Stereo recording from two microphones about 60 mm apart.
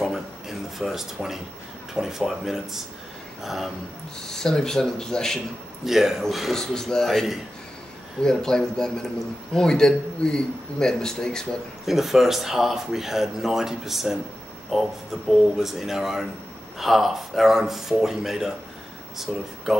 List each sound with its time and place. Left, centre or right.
0.0 s a sound: centre
2.0 s speech: centre
4.3 s a man's voice: centre
5.9 s a man's voice: centre
11.8 s speech: centre